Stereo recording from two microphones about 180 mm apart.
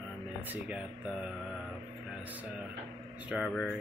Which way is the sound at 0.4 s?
10° right (ahead or behind).